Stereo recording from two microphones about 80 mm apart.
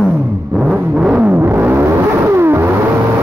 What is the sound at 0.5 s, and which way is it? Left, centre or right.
Vehicle, centre.